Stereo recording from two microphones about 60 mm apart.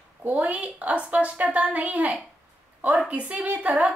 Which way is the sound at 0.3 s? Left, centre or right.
Right.